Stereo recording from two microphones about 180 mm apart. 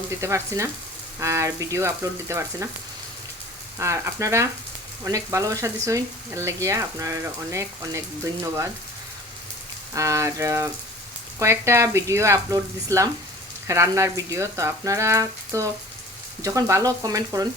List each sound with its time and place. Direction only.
0.1 s speech: 15° right (ahead or behind)
3.8 s speech: 15° right (ahead or behind)
9.9 s speech: 15° right (ahead or behind)